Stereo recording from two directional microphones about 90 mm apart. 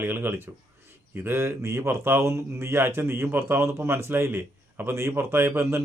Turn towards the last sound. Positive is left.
turn(degrees=-25)  # may be behind; listen again after turning